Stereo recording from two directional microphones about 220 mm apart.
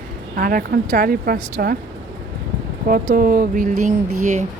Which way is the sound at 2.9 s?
40° right (ahead or behind).